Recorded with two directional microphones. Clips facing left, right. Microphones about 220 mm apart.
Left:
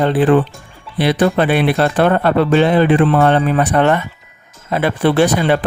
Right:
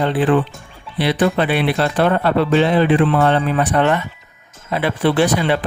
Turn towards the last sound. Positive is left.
turn(degrees=45)  # may be behind; listen again after turning